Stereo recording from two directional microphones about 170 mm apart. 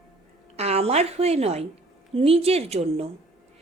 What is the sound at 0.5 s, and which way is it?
A woman's voice, 40° right (ahead or behind).